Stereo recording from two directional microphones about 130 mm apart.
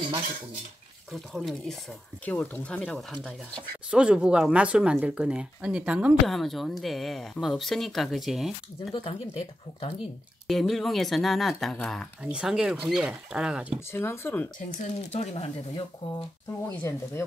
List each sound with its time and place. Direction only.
1.1 s speech: centre (ahead or behind)
2.2 s speech: 10° left (ahead or behind)
3.9 s speech: 10° right (ahead or behind)
6.2 s speech: centre (ahead or behind)
8.9 s speech: 45° left (ahead or behind)
10.4 s speech: centre (ahead or behind)
12.2 s speech: 10° right (ahead or behind)
13.7 s speech: 20° left (ahead or behind)
14.7 s speech: 60° left (ahead or behind)
16.0 s speech: 45° left (ahead or behind)
16.6 s speech: 20° left (ahead or behind)